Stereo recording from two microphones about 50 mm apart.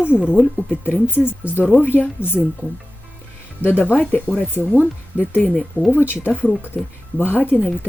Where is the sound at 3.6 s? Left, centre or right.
Left.